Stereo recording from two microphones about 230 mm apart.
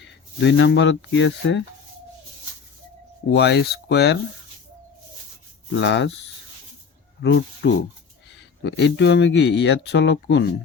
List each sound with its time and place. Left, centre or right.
0.3 s speech: left
3.2 s speech: left
5.7 s speech: left
7.2 s speech: left